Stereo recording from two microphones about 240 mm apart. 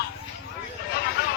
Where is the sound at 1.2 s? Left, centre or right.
Left.